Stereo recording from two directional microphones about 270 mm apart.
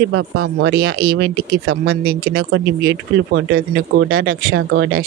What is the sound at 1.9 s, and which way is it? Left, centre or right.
Speech, right.